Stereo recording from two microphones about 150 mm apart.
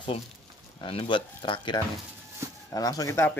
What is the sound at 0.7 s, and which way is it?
Speech, 35° left (ahead or behind).